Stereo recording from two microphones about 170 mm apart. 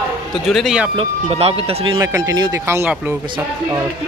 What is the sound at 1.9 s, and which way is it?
Speech, 20° right (ahead or behind).